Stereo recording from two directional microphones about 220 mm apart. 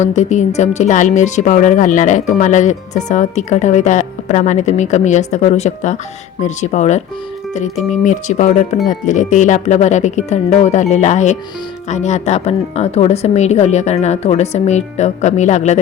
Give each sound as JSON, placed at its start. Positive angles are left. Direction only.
{"t": 0.0, "sound": "speech", "side_deg": 30}
{"t": 8.0, "sound": "speech", "side_deg": 35}